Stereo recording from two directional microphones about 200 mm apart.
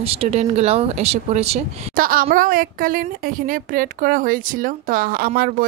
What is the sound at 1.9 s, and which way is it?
A woman's voice, 45° right (ahead or behind).